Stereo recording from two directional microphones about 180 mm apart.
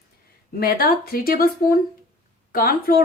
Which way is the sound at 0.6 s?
55° left (ahead or behind).